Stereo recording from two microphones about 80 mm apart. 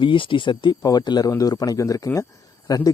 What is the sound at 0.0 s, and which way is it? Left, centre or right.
Speech, left.